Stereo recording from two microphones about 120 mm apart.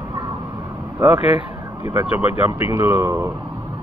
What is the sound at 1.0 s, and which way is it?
Speech, 15° right (ahead or behind).